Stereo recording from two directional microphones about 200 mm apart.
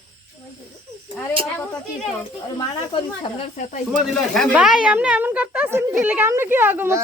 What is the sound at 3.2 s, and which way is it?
Speech, 35° left (ahead or behind).